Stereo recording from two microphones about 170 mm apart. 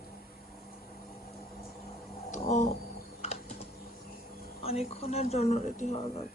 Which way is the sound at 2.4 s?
40° left (ahead or behind).